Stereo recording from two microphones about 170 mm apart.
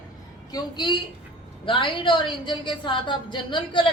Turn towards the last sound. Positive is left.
turn(degrees=30)  # may be behind; listen again after turning